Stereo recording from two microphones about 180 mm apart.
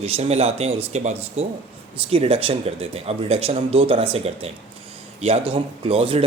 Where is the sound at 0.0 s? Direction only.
35° right (ahead or behind).